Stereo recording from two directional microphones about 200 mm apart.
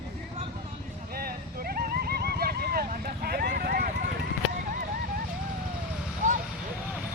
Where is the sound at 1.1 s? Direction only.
50° right (ahead or behind).